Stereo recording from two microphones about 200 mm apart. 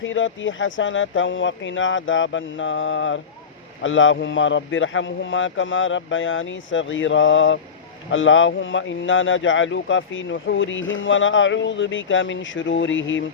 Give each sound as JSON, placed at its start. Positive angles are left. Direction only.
{"t": 0.0, "sound": "speech", "side_deg": 70}